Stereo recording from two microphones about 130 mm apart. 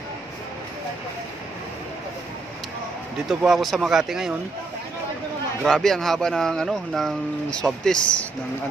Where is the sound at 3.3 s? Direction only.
5° right (ahead or behind).